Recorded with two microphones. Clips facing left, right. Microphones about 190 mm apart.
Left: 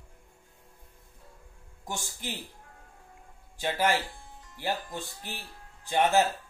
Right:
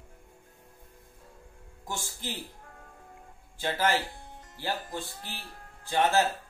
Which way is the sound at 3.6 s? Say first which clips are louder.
Left 1 dB; 15° left (ahead or behind).